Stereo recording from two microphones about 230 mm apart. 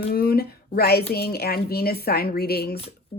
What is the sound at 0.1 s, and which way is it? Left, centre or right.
A woman's voice, left.